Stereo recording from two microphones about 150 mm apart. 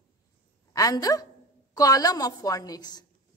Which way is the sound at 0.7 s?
25° left (ahead or behind).